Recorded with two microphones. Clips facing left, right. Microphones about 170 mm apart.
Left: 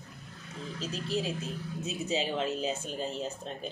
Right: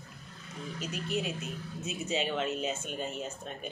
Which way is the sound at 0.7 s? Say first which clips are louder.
Left 1 dB; 30° left (ahead or behind).